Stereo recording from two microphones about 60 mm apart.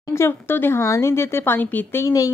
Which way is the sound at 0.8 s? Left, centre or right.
Left.